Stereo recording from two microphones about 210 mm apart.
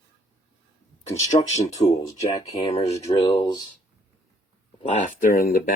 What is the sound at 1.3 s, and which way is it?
Speech, 25° left (ahead or behind).